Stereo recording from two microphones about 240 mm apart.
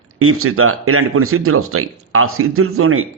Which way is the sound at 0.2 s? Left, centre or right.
Right.